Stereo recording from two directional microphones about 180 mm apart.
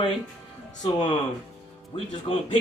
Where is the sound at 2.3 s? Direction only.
30° left (ahead or behind).